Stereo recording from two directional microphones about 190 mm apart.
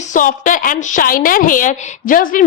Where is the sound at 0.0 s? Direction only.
45° left (ahead or behind).